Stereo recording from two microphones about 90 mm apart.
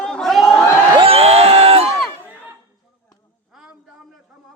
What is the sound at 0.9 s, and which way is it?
Crowd, 85° right.